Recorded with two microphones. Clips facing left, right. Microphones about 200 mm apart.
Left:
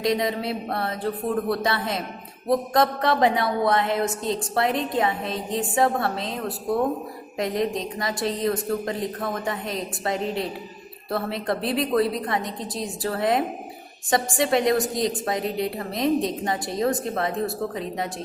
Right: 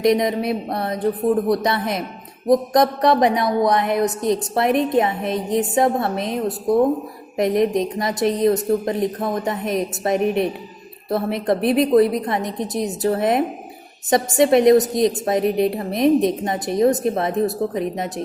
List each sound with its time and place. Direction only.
0.0 s a woman's voice: 20° right (ahead or behind)